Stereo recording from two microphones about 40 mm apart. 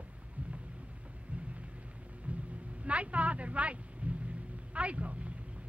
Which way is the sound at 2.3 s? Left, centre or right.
Right.